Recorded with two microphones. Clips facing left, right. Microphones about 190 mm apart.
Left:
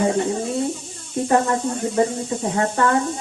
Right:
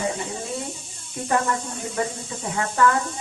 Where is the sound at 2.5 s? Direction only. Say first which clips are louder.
Left 1 dB; 35° left (ahead or behind).